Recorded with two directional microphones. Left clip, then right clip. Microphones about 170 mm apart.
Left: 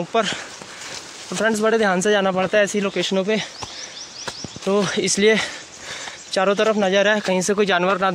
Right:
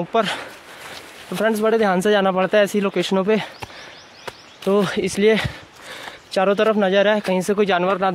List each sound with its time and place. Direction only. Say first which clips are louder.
0.1 s speech: right 1 dB; 20° right (ahead or behind)
1.3 s speech: even; 5° right (ahead or behind)
2.0 s speech: right 1 dB; 20° right (ahead or behind)
4.3 s a sound: right 2 dB; 20° right (ahead or behind)
5.0 s speech: even; 5° left (ahead or behind)
5.3 s a sound: even; 10° right (ahead or behind)
7.2 s speech: even; 5° right (ahead or behind)